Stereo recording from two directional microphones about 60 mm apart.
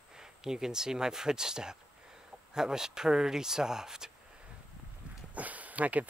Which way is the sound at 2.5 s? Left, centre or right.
Centre.